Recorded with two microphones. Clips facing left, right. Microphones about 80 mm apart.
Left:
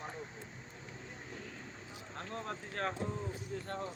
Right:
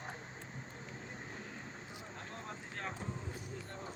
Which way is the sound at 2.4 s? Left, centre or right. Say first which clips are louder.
Left 6 dB; left.